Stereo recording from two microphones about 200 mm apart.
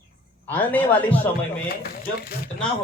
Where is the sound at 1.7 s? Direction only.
50° left (ahead or behind).